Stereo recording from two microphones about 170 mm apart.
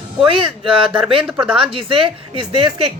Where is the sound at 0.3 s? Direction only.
30° right (ahead or behind).